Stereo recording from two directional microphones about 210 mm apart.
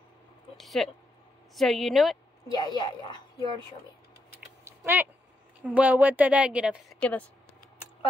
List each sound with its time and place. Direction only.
0.6 s a woman's voice: centre (ahead or behind)
2.4 s a woman's voice: 20° left (ahead or behind)
4.6 s typing: 10° right (ahead or behind)
5.8 s speech: 5° right (ahead or behind)
7.0 s speech: 5° left (ahead or behind)